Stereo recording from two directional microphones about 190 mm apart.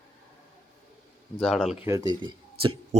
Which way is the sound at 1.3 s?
Centre (ahead or behind).